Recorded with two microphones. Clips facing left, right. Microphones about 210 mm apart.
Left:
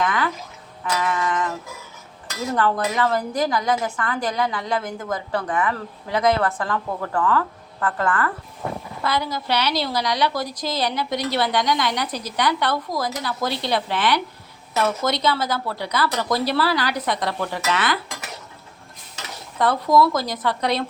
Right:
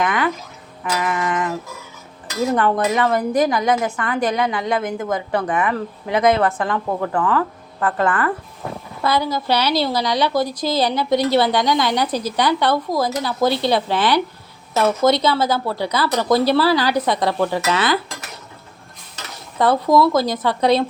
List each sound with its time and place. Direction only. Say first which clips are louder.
0.0 s music: right 3 dB; 20° right (ahead or behind)
2.6 s a woman's voice: right 1 dB; 20° right (ahead or behind)
9.0 s a woman's voice: right 5 dB; 30° right (ahead or behind)
19.5 s a woman's voice: right 3 dB; 25° right (ahead or behind)